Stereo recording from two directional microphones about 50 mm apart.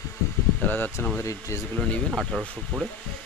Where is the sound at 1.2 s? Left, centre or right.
Left.